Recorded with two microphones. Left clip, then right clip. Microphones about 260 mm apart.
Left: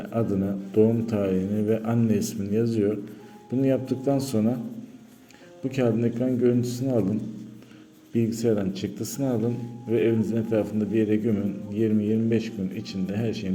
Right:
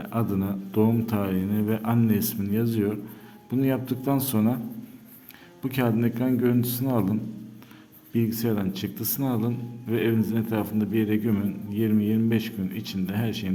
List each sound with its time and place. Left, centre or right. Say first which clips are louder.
0.0 s a man's voice: left 2 dB; centre
5.6 s a man's voice: left 1 dB; centre
8.1 s a man's voice: left 3 dB; centre